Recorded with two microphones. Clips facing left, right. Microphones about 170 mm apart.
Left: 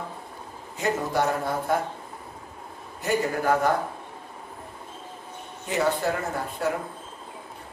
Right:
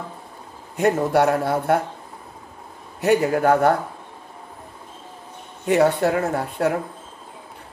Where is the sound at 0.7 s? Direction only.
65° right (ahead or behind).